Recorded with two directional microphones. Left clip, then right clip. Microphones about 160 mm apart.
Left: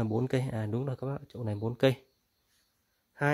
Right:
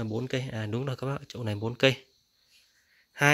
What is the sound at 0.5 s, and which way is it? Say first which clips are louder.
Speech: right 2 dB; 15° left (ahead or behind).